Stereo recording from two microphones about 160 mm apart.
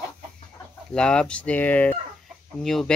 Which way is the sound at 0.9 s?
5° left (ahead or behind).